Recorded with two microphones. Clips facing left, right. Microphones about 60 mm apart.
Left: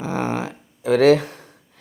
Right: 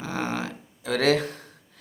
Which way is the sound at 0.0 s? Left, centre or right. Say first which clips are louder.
Left 5 dB; left.